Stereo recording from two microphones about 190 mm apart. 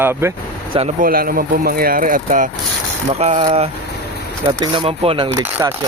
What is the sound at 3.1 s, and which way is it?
Speech, 35° right (ahead or behind).